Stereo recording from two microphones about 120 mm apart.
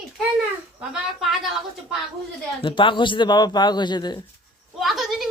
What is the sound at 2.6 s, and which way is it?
Speech, 45° left (ahead or behind).